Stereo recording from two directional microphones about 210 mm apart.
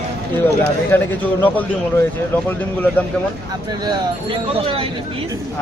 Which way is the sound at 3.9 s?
25° right (ahead or behind).